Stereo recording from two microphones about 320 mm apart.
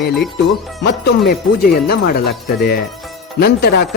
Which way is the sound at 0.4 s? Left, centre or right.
Left.